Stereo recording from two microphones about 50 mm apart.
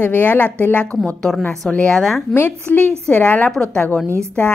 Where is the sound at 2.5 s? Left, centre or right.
Left.